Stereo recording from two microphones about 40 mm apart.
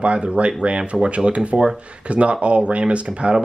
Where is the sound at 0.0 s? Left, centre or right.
Right.